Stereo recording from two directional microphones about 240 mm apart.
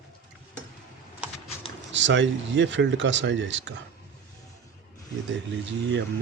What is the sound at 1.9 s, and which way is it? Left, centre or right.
Speech, right.